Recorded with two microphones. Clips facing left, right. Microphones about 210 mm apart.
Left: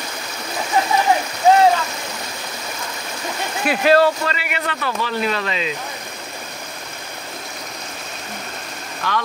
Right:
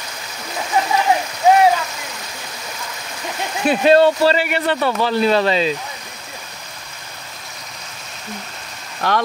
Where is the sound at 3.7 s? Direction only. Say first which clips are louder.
Right 3 dB; 25° right (ahead or behind).